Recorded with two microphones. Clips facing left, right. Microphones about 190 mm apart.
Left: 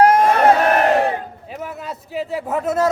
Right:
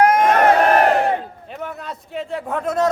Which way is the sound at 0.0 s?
30° left (ahead or behind).